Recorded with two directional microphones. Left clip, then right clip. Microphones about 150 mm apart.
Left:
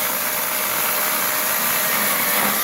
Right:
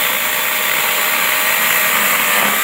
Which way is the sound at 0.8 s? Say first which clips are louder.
Right 7 dB; 15° right (ahead or behind).